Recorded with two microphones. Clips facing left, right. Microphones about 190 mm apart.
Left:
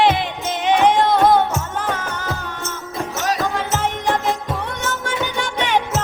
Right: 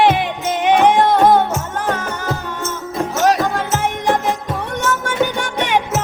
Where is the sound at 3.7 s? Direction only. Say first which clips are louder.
Right 3 dB; 15° right (ahead or behind).